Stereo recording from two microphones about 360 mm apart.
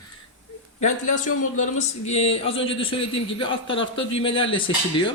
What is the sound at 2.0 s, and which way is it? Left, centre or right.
A man's voice, centre.